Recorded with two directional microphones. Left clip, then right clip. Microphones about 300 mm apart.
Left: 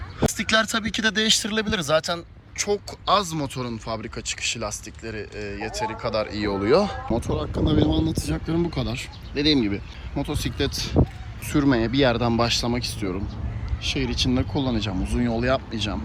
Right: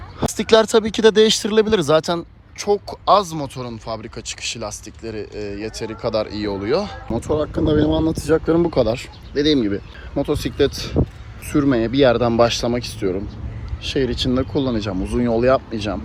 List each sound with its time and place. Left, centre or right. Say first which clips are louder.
0.3 s speech: right 7 dB; centre
7.3 s speech: right 11 dB; centre
8.3 s speech: right 10 dB; centre